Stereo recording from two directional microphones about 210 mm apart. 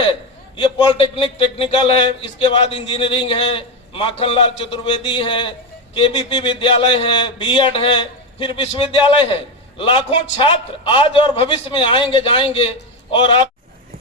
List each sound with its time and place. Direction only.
0.0 s a man's voice: 25° left (ahead or behind)